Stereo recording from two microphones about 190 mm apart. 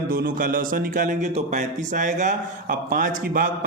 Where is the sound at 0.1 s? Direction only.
45° right (ahead or behind).